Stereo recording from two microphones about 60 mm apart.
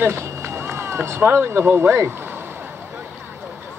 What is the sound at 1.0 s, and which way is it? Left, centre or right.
Speech, right.